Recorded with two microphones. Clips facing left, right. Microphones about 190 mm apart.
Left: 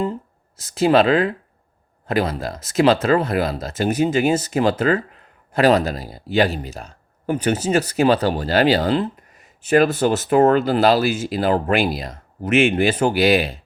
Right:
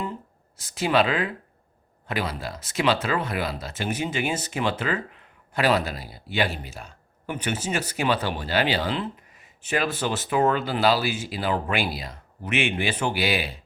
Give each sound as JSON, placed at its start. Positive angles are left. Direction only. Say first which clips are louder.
{"t": 0.0, "sound": "speech", "louder": "left 8 dB", "side_deg": 40}